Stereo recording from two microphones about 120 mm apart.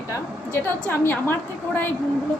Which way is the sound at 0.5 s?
15° left (ahead or behind).